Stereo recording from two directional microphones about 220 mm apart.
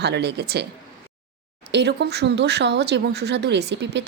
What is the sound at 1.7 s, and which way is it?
Speech, 50° right (ahead or behind).